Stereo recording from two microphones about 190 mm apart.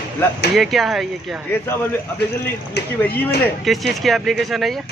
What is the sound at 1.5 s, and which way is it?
A man's voice, 10° left (ahead or behind).